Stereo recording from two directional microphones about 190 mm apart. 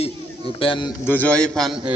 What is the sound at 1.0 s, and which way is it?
Speech, 10° left (ahead or behind).